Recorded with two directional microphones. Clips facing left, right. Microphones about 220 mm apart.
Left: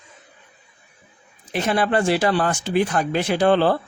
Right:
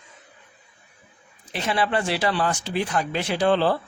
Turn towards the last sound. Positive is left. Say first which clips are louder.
# left 3 dB
turn(degrees=55)  # may be behind; listen again after turning